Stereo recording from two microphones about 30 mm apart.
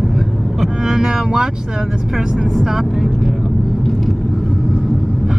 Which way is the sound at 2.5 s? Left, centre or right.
Centre.